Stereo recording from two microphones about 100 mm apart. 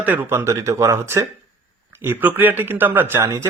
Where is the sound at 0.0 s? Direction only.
20° right (ahead or behind).